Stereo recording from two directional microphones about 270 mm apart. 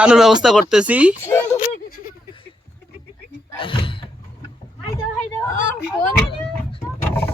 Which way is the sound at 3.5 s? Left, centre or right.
Centre.